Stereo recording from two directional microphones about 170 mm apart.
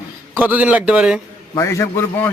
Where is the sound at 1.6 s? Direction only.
15° left (ahead or behind).